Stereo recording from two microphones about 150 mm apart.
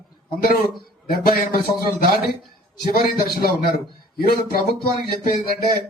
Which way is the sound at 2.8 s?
85° left.